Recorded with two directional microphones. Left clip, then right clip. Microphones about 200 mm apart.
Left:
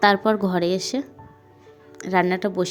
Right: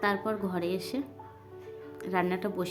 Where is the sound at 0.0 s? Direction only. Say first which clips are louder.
Left 12 dB; 40° left (ahead or behind).